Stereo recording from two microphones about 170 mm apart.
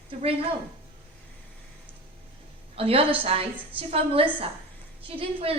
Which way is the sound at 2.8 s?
35° right (ahead or behind).